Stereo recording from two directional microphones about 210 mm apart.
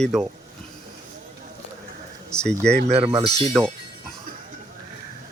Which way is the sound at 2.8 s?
30° right (ahead or behind).